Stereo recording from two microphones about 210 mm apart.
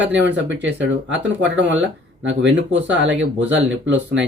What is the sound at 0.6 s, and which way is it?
Speech, 60° right (ahead or behind).